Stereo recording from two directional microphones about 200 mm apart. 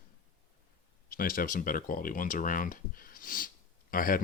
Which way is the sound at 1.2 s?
45° left (ahead or behind).